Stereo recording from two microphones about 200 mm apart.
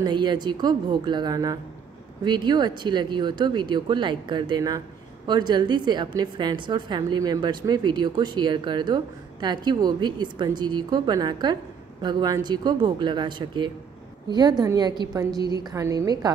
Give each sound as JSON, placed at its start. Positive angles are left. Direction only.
{"t": 0.0, "sound": "a woman's voice", "side_deg": -20}